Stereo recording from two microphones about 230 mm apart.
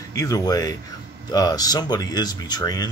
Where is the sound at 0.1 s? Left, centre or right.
Centre.